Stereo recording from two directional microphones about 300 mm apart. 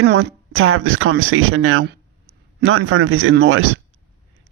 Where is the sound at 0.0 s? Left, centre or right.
Right.